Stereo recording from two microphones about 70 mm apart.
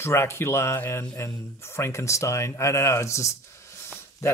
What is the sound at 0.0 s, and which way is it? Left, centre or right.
Speech, left.